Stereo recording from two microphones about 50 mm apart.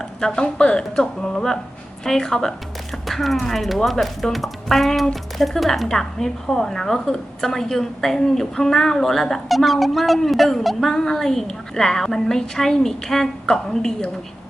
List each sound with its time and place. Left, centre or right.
0.2 s speech: centre